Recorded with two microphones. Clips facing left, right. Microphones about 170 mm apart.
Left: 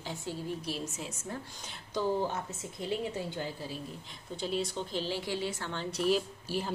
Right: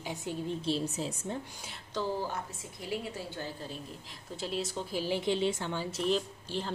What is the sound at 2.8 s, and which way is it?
Speech, 20° left (ahead or behind).